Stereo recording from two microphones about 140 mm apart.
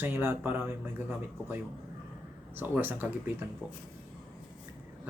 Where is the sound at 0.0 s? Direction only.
15° right (ahead or behind).